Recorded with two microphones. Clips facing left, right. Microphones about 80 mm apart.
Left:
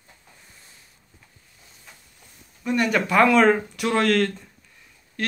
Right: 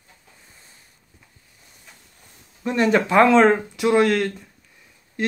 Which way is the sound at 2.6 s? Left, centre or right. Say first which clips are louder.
Right 3 dB; right.